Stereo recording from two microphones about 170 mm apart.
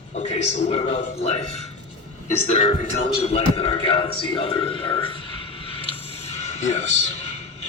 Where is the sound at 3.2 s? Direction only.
35° left (ahead or behind).